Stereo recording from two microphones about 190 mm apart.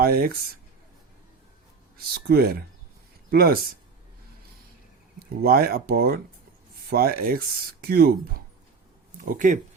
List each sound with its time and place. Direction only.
0.0 s speech: 50° right (ahead or behind)
2.3 s speech: 55° right (ahead or behind)
5.4 s speech: 50° right (ahead or behind)